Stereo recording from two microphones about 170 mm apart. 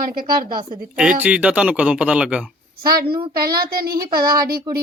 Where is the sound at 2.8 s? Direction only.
60° right (ahead or behind).